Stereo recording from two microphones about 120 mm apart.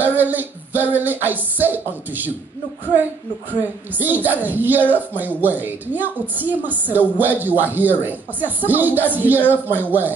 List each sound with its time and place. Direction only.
0.0 s a woman's voice: 15° right (ahead or behind)
3.9 s a woman's voice: 15° right (ahead or behind)